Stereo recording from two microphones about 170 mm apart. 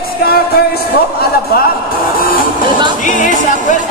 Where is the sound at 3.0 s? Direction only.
50° left (ahead or behind).